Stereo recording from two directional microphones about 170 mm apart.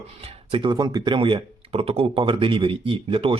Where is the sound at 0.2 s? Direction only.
35° right (ahead or behind).